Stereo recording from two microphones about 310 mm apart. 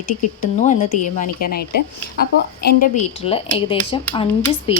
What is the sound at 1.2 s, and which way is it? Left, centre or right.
A woman's voice, left.